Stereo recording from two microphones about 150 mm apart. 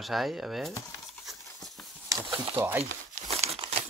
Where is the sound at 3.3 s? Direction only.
40° right (ahead or behind).